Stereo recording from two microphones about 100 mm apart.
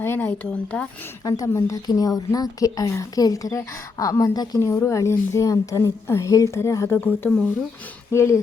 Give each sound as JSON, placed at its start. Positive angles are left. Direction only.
{"t": 0.0, "sound": "speech", "side_deg": 20}
{"t": 1.2, "sound": "a woman's voice", "side_deg": 40}